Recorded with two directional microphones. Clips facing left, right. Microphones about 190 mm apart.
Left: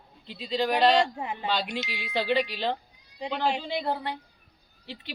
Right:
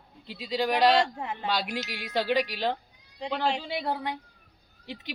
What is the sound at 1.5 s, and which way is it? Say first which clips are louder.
Speech: even; 10° right (ahead or behind).